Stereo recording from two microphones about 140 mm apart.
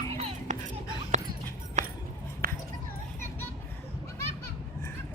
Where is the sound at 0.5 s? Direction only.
60° right (ahead or behind).